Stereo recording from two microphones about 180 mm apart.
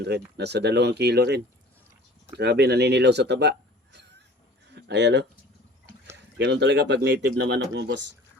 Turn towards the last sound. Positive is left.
turn(degrees=-75)  # may be behind; listen again after turning